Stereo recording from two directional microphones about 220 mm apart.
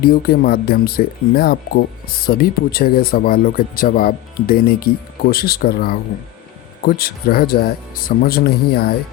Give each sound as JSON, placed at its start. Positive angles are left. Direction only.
{"t": 0.0, "sound": "speech", "side_deg": 45}